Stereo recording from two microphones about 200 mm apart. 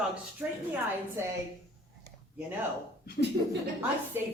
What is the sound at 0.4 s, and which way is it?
Speech, 10° right (ahead or behind).